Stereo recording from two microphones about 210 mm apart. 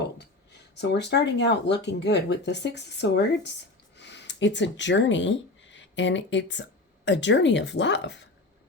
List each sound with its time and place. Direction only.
0.0 s speech: 55° left (ahead or behind)